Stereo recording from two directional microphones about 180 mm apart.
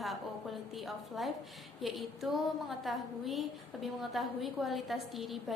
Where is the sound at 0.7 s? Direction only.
Centre (ahead or behind).